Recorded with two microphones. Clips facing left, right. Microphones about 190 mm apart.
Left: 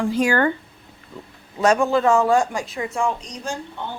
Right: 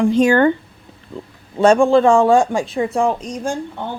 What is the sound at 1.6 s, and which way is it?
Speech, 30° right (ahead or behind).